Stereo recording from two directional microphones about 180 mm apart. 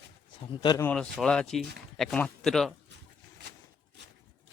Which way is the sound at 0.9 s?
5° left (ahead or behind).